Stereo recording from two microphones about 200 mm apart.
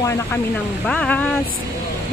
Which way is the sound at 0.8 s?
5° left (ahead or behind).